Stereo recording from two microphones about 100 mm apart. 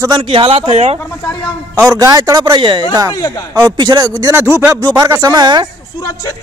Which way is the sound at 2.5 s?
55° right (ahead or behind).